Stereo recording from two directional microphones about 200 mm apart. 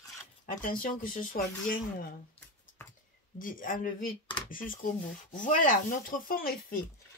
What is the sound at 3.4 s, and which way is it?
Speech, 45° left (ahead or behind).